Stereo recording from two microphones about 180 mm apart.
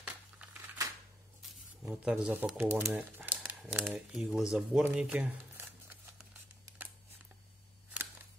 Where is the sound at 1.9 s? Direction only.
5° right (ahead or behind).